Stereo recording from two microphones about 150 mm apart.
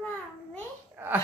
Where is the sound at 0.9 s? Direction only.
10° right (ahead or behind).